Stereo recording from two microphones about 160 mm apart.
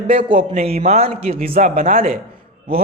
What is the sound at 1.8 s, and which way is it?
Speech, 60° right (ahead or behind).